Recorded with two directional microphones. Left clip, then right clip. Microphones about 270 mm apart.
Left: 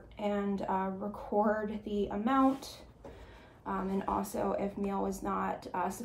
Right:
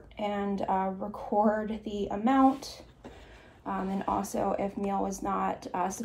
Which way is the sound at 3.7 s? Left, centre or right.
Centre.